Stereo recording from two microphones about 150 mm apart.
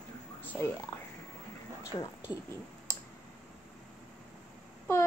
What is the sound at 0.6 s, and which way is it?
Speech, 15° left (ahead or behind).